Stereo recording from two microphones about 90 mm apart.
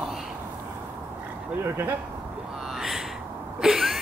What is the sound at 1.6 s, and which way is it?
Speech, 30° right (ahead or behind).